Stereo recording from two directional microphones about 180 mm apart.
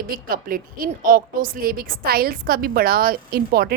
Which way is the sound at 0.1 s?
55° right (ahead or behind).